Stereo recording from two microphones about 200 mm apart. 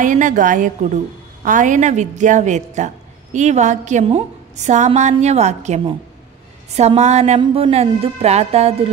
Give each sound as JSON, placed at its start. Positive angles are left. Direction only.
{"t": 0.0, "sound": "a woman's voice", "side_deg": -40}